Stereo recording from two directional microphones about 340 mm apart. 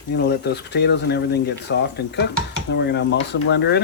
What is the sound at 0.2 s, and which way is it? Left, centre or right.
Speech, left.